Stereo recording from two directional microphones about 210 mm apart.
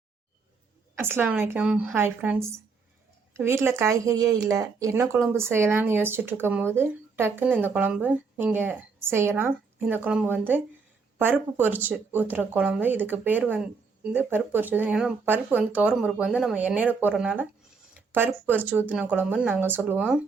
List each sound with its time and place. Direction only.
1.0 s speech: 10° right (ahead or behind)